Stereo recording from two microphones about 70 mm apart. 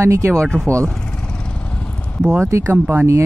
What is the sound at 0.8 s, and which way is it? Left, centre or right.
Vehicle, centre.